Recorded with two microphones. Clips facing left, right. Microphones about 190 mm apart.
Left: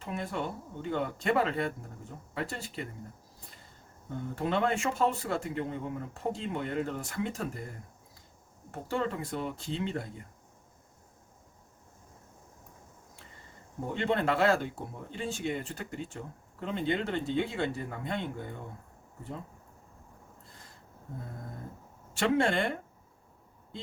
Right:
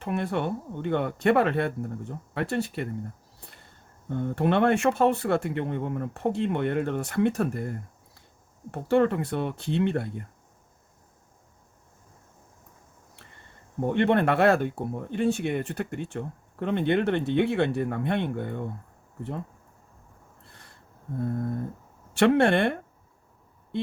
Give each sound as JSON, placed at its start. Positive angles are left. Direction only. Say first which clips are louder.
{"t": 0.0, "sound": "speech", "louder": "right 7 dB", "side_deg": -65}
{"t": 4.1, "sound": "speech", "louder": "right 7 dB", "side_deg": -65}
{"t": 13.8, "sound": "speech", "louder": "right 7 dB", "side_deg": -60}
{"t": 20.5, "sound": "a sound", "louder": "right 1 dB", "side_deg": -65}
{"t": 22.1, "sound": "speech", "louder": "right 7 dB", "side_deg": -65}